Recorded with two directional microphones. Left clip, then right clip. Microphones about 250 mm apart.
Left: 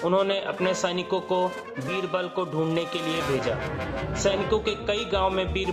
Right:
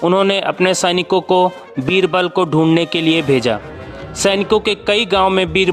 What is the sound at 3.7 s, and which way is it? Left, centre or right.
Speech, centre.